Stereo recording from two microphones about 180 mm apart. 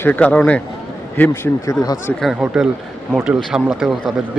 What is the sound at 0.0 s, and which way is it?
A man's voice, 10° left (ahead or behind).